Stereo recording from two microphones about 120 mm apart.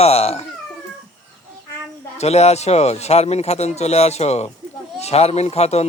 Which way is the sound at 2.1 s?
65° left (ahead or behind).